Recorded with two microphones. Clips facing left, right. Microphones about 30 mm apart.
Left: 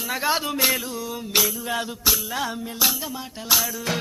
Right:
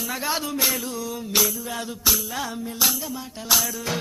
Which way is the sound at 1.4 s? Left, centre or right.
Centre.